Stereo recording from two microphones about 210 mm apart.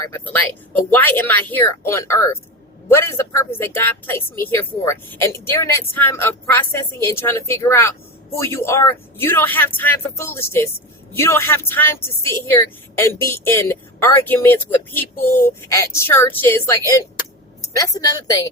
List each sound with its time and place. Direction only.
0.1 s a woman's voice: 10° left (ahead or behind)